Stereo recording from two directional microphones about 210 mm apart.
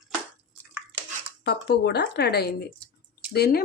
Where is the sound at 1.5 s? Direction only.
50° left (ahead or behind).